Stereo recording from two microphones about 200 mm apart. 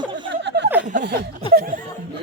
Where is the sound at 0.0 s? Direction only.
25° right (ahead or behind).